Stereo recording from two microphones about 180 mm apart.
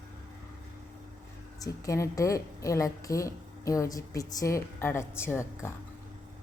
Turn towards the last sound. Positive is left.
turn(degrees=15)  # may be behind; listen again after turning